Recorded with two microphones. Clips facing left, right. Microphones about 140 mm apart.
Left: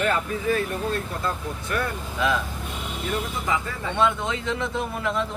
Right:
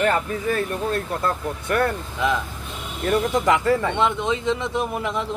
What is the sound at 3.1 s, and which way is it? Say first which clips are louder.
Speech: right 8 dB; 85° right.